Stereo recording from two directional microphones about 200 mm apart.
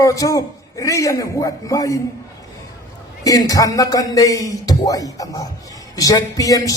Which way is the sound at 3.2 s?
15° left (ahead or behind).